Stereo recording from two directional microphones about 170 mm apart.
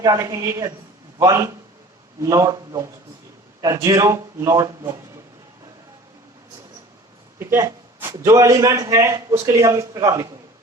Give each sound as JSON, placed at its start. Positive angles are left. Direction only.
{"t": 0.0, "sound": "a man's voice", "side_deg": -20}
{"t": 2.2, "sound": "a man's voice", "side_deg": -20}
{"t": 7.3, "sound": "a man's voice", "side_deg": -15}